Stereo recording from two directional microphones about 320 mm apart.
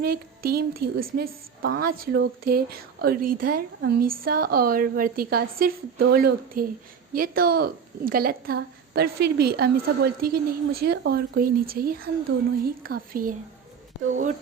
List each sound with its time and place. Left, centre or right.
0.0 s a woman's voice: right